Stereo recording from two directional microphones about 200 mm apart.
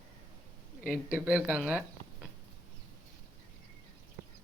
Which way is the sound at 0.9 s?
5° right (ahead or behind).